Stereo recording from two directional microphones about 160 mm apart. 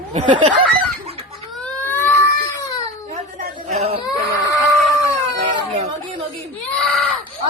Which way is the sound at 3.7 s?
40° right (ahead or behind).